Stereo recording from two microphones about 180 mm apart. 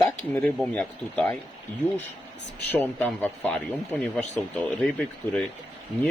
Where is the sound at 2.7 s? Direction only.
10° left (ahead or behind).